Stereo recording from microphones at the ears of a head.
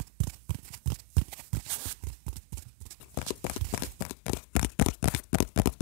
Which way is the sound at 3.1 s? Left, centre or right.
Left.